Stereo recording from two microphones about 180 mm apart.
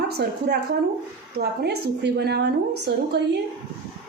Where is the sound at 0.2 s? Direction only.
65° right (ahead or behind).